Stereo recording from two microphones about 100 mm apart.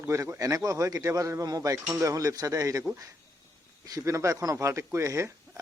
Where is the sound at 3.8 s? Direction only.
35° right (ahead or behind).